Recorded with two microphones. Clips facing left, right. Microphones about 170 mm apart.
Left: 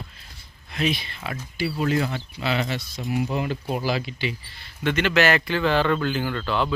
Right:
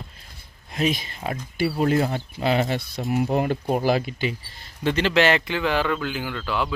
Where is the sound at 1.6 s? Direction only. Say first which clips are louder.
Right 3 dB; 45° right (ahead or behind).